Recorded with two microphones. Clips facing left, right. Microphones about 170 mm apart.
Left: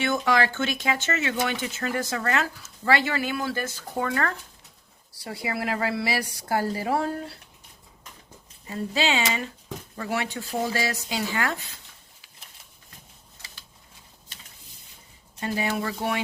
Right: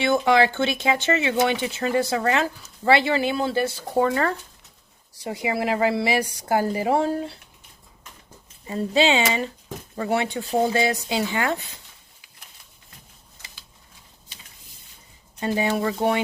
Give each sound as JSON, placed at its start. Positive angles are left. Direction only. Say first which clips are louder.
{"t": 0.0, "sound": "a woman's voice", "louder": "right 5 dB", "side_deg": -25}
{"t": 3.5, "sound": "speech", "louder": "right 7 dB", "side_deg": -15}
{"t": 3.9, "sound": "a woman's voice", "louder": "right 6 dB", "side_deg": -25}
{"t": 5.3, "sound": "a woman's voice", "louder": "right 5 dB", "side_deg": -20}
{"t": 8.6, "sound": "a woman's voice", "louder": "right 6 dB", "side_deg": -30}
{"t": 15.4, "sound": "a woman's voice", "louder": "right 4 dB", "side_deg": -25}